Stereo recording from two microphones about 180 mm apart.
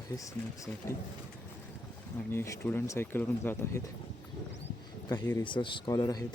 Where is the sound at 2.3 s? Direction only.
15° left (ahead or behind).